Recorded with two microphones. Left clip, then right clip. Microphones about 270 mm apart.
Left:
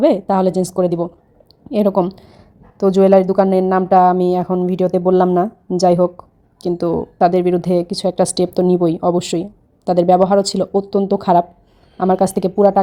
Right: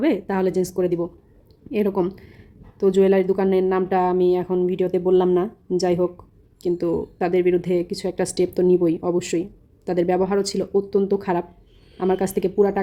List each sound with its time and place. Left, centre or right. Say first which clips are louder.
0.0 s a woman's voice: left 8 dB; centre